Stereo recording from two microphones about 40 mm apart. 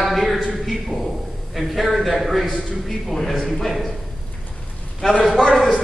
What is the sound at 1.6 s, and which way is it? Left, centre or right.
A man's voice, centre.